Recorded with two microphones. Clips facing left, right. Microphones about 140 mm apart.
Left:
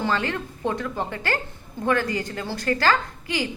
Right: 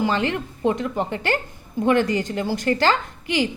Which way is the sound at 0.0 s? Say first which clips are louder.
Right 3 dB; 20° right (ahead or behind).